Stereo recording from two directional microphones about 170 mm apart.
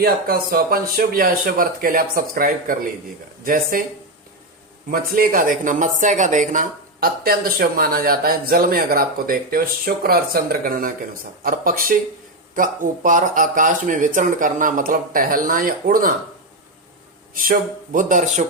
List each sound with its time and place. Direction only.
0.0 s speech: 60° right (ahead or behind)
4.9 s speech: 60° right (ahead or behind)
17.3 s speech: 50° right (ahead or behind)